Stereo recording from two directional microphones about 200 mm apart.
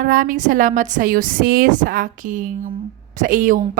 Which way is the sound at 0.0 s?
45° right (ahead or behind).